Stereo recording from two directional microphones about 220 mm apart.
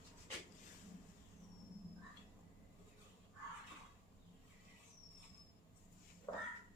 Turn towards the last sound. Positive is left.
turn(degrees=15)  # may be behind; listen again after turning